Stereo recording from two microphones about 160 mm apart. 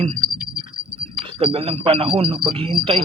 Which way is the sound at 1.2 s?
35° right (ahead or behind).